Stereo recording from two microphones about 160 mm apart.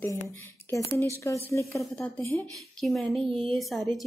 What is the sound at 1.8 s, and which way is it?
Speech, 10° left (ahead or behind).